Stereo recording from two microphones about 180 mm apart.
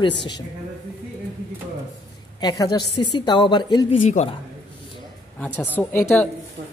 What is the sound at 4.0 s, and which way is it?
Speech, 45° left (ahead or behind).